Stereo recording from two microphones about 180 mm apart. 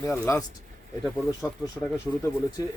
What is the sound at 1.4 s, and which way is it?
Speech, 15° left (ahead or behind).